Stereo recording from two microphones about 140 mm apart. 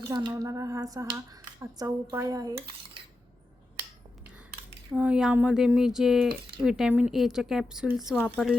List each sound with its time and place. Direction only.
0.1 s speech: 35° right (ahead or behind)
4.9 s speech: 5° right (ahead or behind)